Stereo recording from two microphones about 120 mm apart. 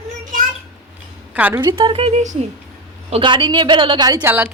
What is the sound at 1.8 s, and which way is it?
Speech, 50° right (ahead or behind).